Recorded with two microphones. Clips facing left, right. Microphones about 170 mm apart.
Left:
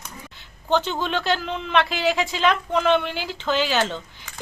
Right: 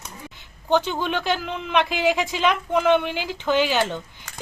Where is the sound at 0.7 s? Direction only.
10° right (ahead or behind).